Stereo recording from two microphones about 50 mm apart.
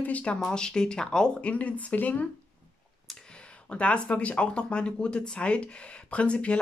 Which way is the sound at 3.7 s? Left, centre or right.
Left.